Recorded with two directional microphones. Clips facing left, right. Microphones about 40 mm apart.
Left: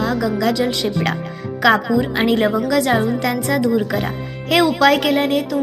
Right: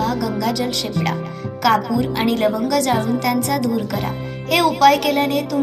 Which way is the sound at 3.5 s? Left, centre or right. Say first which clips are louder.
Left 3 dB; left.